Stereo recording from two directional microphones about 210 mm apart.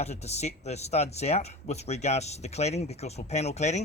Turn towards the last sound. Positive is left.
turn(degrees=30)  # may be behind; listen again after turning